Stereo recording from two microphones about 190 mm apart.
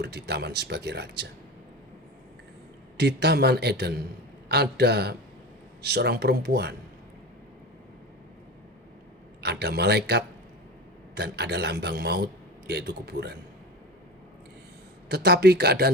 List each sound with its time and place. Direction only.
0.0 s a man's voice: 60° right (ahead or behind)
3.0 s a man's voice: 60° right (ahead or behind)
9.4 s a man's voice: 60° right (ahead or behind)
15.1 s a man's voice: 60° right (ahead or behind)